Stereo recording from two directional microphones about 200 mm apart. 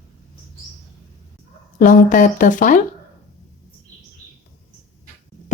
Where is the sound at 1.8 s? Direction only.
40° left (ahead or behind).